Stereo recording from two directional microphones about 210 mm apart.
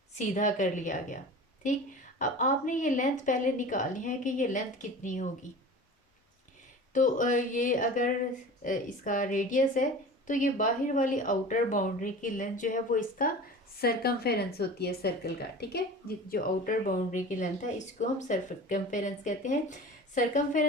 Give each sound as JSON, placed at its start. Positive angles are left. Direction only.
{"t": 0.1, "sound": "speech", "side_deg": 35}
{"t": 6.9, "sound": "speech", "side_deg": 35}